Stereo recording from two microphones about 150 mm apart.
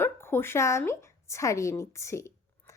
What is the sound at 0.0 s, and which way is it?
A woman's voice, 15° left (ahead or behind).